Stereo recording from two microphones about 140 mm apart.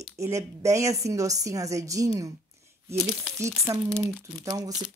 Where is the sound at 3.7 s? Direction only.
25° right (ahead or behind).